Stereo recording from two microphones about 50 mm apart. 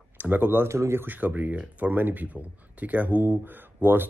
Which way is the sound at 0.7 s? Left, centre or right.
Right.